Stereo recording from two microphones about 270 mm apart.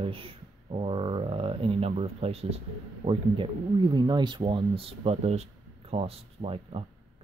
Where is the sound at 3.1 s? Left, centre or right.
Centre.